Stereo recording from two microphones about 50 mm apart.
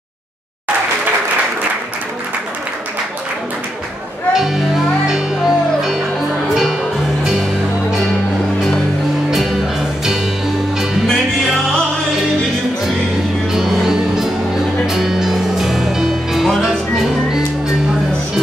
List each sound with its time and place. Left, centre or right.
4.3 s music: centre
9.3 s music: centre
13.5 s music: centre